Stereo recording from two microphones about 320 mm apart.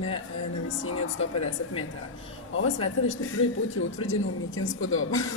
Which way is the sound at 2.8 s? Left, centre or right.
Left.